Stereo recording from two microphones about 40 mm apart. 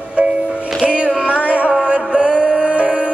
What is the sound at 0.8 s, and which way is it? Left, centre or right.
Music, right.